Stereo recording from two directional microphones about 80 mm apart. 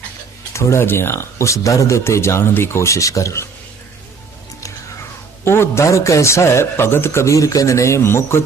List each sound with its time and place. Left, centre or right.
0.5 s a man's voice: left
5.5 s a man's voice: left